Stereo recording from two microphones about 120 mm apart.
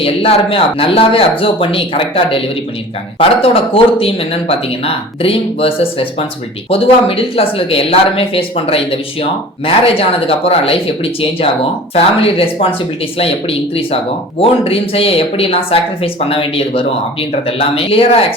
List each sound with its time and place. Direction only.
0.0 s a woman's voice: 55° left (ahead or behind)